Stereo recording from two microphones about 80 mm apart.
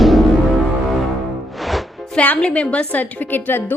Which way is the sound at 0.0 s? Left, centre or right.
Centre.